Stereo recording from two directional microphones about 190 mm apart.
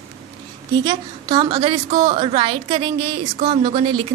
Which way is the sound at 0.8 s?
25° right (ahead or behind).